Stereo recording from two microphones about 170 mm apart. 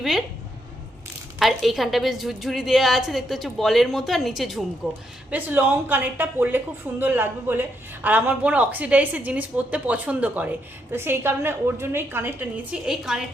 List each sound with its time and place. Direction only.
1.4 s a woman's voice: centre (ahead or behind)
5.3 s speech: 10° right (ahead or behind)